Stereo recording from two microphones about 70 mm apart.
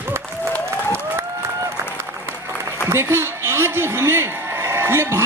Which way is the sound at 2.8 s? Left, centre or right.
Right.